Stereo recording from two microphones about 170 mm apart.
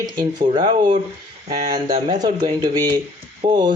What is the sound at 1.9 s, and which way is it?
Speech, 25° right (ahead or behind).